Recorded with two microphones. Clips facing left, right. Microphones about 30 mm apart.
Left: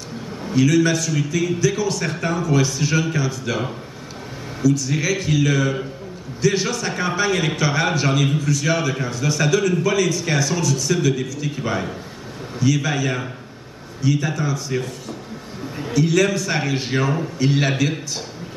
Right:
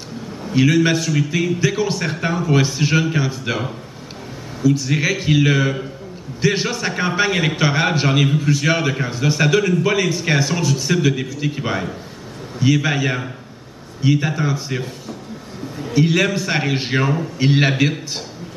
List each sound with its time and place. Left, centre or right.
0.6 s a man's voice: right
4.6 s a man's voice: right
15.9 s a man's voice: right